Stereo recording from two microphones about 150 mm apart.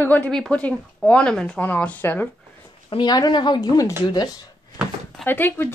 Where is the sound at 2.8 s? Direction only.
30° left (ahead or behind).